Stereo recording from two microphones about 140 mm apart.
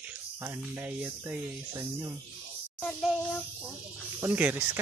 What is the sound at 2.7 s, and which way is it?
Child singing, centre (ahead or behind).